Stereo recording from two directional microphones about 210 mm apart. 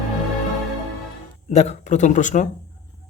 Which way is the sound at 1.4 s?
30° left (ahead or behind).